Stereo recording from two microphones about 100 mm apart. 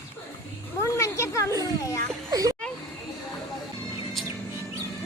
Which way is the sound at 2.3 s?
35° right (ahead or behind).